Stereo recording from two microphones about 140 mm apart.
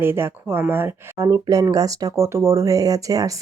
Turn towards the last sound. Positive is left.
turn(degrees=-25)  # may be behind; listen again after turning